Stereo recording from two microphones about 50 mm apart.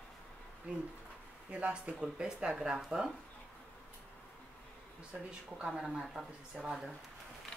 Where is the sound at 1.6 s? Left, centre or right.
Right.